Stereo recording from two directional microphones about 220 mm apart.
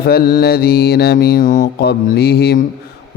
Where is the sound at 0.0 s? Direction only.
45° left (ahead or behind).